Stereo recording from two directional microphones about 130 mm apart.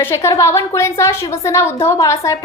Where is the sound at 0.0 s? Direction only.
20° left (ahead or behind).